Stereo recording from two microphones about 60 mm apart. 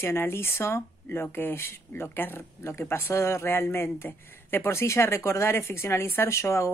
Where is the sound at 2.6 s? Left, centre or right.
Left.